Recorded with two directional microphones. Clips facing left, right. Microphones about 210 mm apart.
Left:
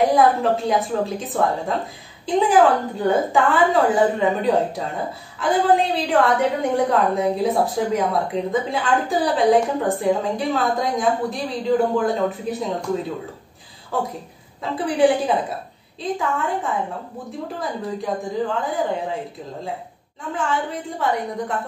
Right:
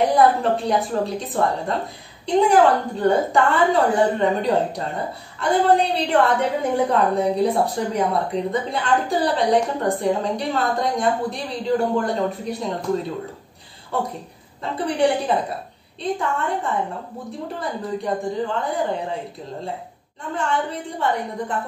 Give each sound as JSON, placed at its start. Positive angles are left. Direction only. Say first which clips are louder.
{"t": 0.0, "sound": "a woman's voice", "louder": "even", "side_deg": 0}
{"t": 14.6, "sound": "a woman's voice", "louder": "left 2 dB", "side_deg": 0}
{"t": 20.3, "sound": "a woman's voice", "louder": "even", "side_deg": 0}